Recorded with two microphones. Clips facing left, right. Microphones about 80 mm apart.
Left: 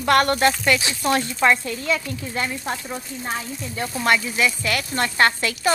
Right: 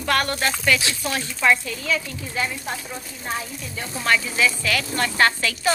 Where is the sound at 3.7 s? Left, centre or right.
Left.